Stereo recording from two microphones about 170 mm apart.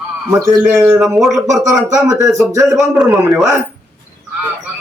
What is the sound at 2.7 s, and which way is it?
Speech, centre (ahead or behind).